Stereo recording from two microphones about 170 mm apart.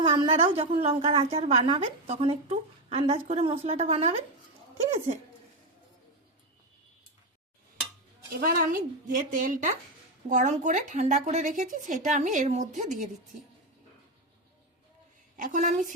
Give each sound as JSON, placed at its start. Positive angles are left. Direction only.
{"t": 0.0, "sound": "a woman's voice", "side_deg": -30}
{"t": 8.3, "sound": "speech", "side_deg": -60}
{"t": 15.4, "sound": "speech", "side_deg": -50}